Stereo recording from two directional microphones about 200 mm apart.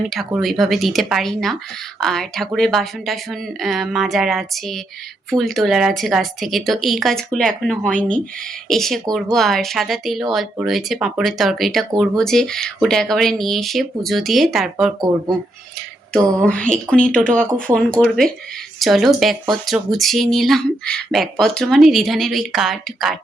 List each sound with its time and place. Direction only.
0.1 s speech: centre (ahead or behind)
16.1 s speech: 5° left (ahead or behind)
17.2 s speech: 40° right (ahead or behind)
17.7 s speech: 5° left (ahead or behind)